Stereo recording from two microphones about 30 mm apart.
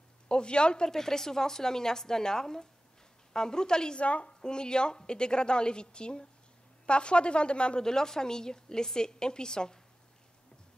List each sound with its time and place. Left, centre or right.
0.3 s a woman's voice: left
0.8 s a woman's voice: centre
4.0 s a woman's voice: left
4.3 s a woman's voice: left
7.8 s a woman's voice: left